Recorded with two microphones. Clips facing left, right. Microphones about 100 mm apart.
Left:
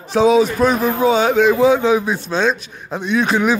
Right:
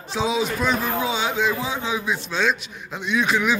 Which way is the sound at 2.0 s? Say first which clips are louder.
Left 5 dB; 35° left (ahead or behind).